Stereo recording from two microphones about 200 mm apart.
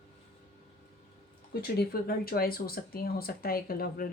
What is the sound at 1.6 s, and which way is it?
Speech, 50° left (ahead or behind).